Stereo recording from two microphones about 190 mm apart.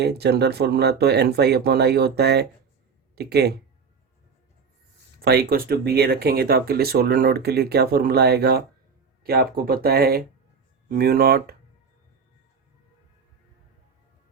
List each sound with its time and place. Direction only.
0.0 s speech: 60° right (ahead or behind)
5.2 s speech: 55° right (ahead or behind)